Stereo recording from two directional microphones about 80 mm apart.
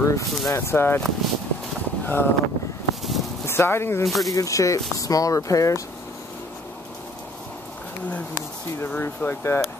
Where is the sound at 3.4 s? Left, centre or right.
Left.